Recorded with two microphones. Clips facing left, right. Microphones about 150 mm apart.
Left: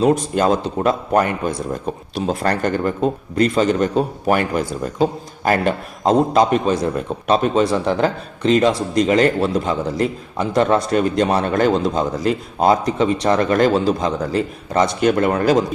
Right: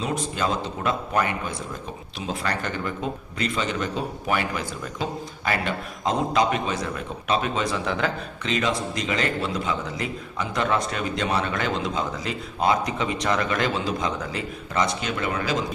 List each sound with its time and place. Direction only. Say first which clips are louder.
0.0 s a man's voice: left 10 dB; 55° left (ahead or behind)